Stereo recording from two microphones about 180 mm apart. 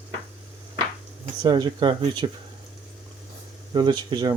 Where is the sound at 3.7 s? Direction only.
25° right (ahead or behind).